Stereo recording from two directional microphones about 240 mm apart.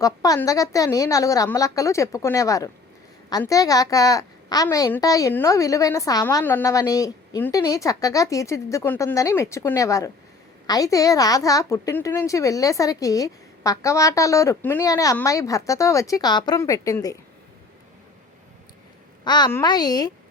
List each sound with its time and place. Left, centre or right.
0.0 s a woman's voice: centre
19.2 s a woman's voice: centre